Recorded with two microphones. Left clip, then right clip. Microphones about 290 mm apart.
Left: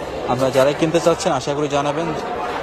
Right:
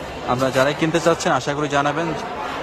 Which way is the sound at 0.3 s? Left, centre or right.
Centre.